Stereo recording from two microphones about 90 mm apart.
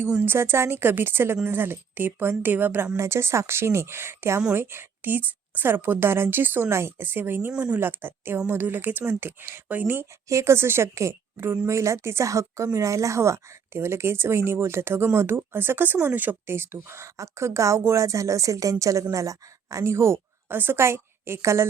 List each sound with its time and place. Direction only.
0.3 s a woman's voice: 25° right (ahead or behind)